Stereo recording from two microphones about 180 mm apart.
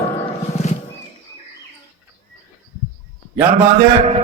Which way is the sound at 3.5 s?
40° right (ahead or behind).